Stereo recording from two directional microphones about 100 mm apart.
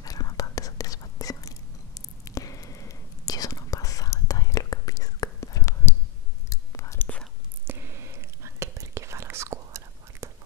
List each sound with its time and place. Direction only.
0.0 s whispering: 35° left (ahead or behind)
7.0 s whispering: 15° left (ahead or behind)
7.6 s whispering: 25° right (ahead or behind)